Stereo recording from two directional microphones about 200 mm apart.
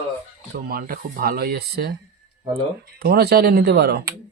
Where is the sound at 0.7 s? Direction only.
45° right (ahead or behind).